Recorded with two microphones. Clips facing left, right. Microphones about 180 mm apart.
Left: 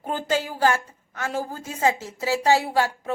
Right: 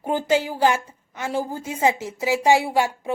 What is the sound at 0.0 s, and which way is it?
A woman's voice, 10° right (ahead or behind).